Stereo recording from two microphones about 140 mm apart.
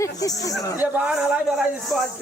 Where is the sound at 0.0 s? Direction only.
25° left (ahead or behind).